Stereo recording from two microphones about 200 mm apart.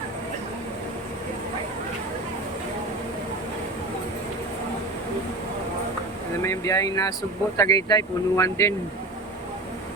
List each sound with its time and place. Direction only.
6.4 s speech: 15° left (ahead or behind)